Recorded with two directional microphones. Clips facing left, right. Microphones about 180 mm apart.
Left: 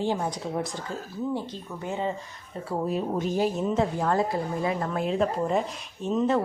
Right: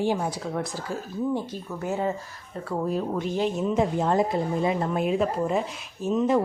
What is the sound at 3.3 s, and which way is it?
Speech, 10° left (ahead or behind).